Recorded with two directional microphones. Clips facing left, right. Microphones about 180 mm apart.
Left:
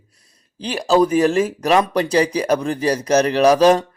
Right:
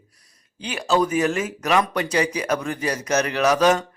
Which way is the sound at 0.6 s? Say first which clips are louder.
Left 5 dB; 35° left (ahead or behind).